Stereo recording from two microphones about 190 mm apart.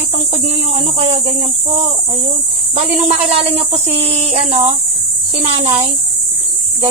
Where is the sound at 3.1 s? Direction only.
30° right (ahead or behind).